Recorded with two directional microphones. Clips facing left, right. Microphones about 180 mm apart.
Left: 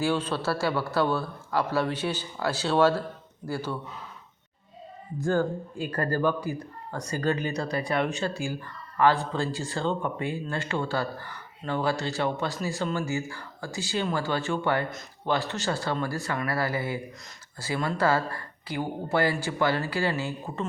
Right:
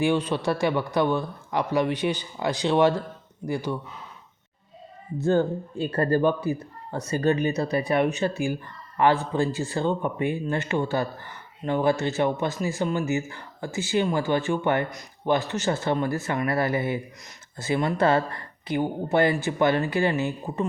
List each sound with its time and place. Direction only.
0.0 s a man's voice: 15° right (ahead or behind)
5.2 s a man's voice: 20° right (ahead or behind)